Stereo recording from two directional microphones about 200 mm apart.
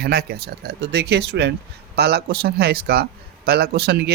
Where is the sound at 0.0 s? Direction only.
50° right (ahead or behind).